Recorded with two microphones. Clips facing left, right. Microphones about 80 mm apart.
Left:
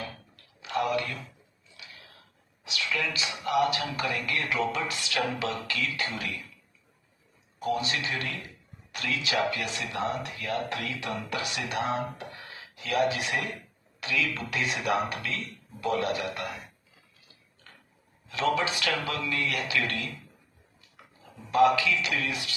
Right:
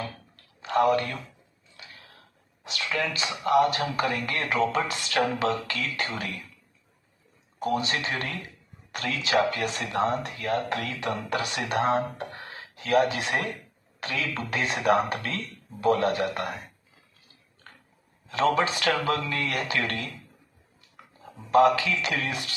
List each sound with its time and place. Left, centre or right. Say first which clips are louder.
0.6 s a man's voice: right 6 dB; right
1.7 s a sound: right 1 dB; right
2.6 s speech: right 2 dB; right
7.6 s a man's voice: right 2 dB; right
17.7 s a sound: right 3 dB; right
18.3 s speech: right 4 dB; right
21.5 s speech: right 2 dB; right